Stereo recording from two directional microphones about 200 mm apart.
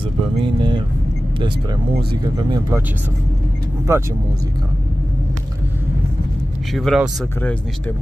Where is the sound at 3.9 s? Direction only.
15° right (ahead or behind).